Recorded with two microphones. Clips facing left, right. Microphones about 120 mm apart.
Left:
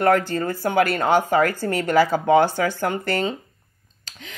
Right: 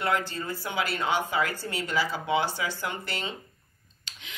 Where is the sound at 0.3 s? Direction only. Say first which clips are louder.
Left 11 dB; 50° left (ahead or behind).